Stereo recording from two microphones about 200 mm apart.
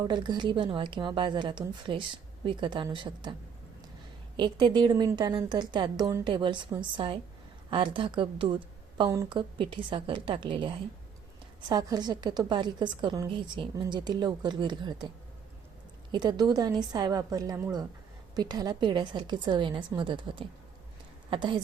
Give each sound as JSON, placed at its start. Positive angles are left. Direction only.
{"t": 0.0, "sound": "speech", "side_deg": -20}
{"t": 4.4, "sound": "speech", "side_deg": -20}
{"t": 16.1, "sound": "a woman's voice", "side_deg": -20}